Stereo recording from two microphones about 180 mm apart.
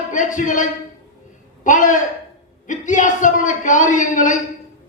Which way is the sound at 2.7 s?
45° left (ahead or behind).